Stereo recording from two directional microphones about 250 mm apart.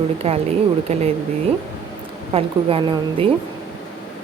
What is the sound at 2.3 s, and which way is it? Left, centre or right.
Speech, right.